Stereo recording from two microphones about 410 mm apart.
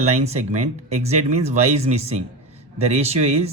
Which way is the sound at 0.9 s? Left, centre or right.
Centre.